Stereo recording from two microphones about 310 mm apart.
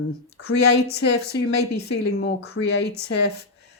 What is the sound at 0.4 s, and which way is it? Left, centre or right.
Speech, left.